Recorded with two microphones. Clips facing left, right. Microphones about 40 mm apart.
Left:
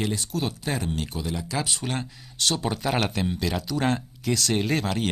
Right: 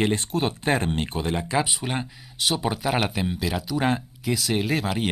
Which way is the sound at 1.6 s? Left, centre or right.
Centre.